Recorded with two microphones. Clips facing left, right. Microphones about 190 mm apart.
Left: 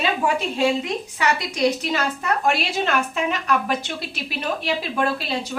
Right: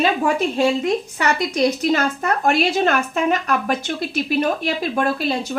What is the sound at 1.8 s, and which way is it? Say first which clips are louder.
A woman's voice: right 5 dB; 45° right (ahead or behind).